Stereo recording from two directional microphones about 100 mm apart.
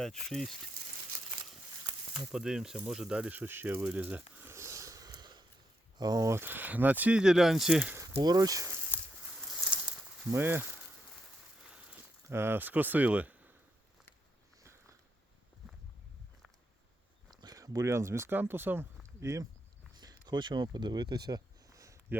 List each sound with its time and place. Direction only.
0.0 s speech: 5° left (ahead or behind)
2.3 s speech: 5° right (ahead or behind); by 6.3 s 40° right (ahead or behind)
6.3 s speech: 20° right (ahead or behind); by 7.9 s 5° right (ahead or behind)
8.2 s speech: 40° right (ahead or behind)
9.6 s a sound: 10° right (ahead or behind)
10.3 s speech: 20° right (ahead or behind)
12.3 s speech: 25° right (ahead or behind)
14.6 s a sound: 30° right (ahead or behind)
17.3 s speech: 40° right (ahead or behind)
20.0 s a sound: 45° right (ahead or behind)